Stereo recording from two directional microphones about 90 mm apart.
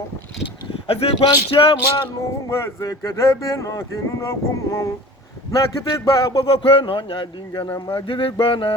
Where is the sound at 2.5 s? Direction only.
35° left (ahead or behind).